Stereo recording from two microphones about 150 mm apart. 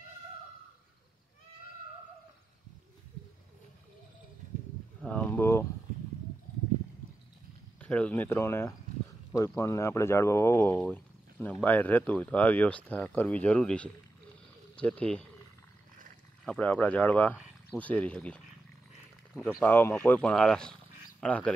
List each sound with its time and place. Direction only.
5.0 s a sound: 10° left (ahead or behind)
7.8 s speech: 10° left (ahead or behind)
16.4 s speech: 10° left (ahead or behind)